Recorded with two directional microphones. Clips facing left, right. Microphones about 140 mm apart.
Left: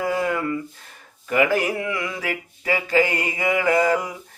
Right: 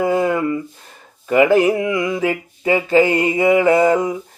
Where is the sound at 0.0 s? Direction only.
25° right (ahead or behind).